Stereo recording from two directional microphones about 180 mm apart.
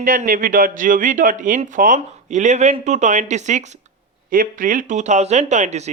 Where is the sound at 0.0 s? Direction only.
45° right (ahead or behind).